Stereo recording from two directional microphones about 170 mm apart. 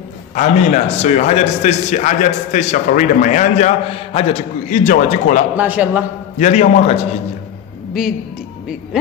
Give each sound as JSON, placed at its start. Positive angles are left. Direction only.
{"t": 0.3, "sound": "a man's voice", "side_deg": 45}
{"t": 5.6, "sound": "a man's voice", "side_deg": -10}
{"t": 6.3, "sound": "a man's voice", "side_deg": 40}